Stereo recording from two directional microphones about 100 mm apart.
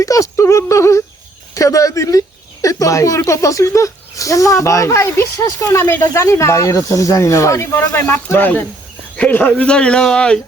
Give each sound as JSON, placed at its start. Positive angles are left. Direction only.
{"t": 0.0, "sound": "speech", "side_deg": 35}